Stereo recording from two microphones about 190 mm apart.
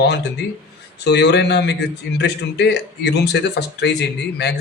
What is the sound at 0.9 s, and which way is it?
Speech, 65° left (ahead or behind).